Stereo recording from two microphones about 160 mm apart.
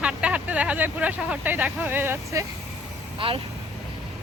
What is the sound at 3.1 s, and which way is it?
Speech, 35° right (ahead or behind).